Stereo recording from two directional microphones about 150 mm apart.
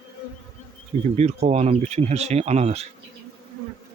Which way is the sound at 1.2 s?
45° right (ahead or behind).